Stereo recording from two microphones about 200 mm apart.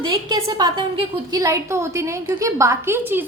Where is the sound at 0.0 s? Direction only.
20° right (ahead or behind).